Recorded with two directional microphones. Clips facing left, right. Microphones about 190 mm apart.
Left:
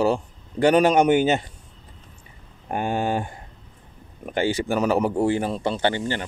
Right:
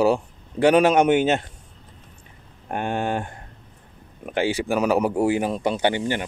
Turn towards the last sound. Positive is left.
turn(degrees=-15)  # may be behind; listen again after turning